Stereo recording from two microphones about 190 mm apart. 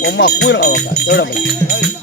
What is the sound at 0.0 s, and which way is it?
Speech, 65° left (ahead or behind).